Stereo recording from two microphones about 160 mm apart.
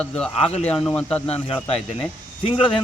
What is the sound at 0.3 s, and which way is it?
Speech, 40° left (ahead or behind).